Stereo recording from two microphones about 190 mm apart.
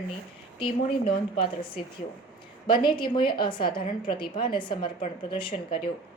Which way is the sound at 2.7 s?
25° left (ahead or behind).